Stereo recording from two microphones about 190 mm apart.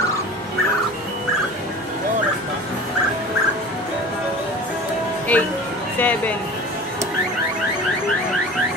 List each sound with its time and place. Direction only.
5.3 s speech: 5° left (ahead or behind)